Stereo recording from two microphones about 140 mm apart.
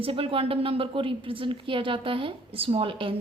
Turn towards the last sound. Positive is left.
turn(degrees=-40)  # may be behind; listen again after turning